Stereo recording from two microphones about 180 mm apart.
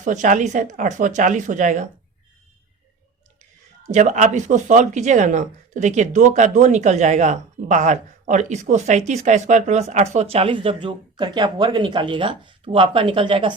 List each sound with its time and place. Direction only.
0.0 s speech: 45° right (ahead or behind)
3.9 s speech: 40° right (ahead or behind)